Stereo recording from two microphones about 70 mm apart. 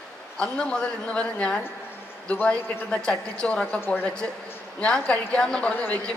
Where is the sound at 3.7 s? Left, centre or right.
Left.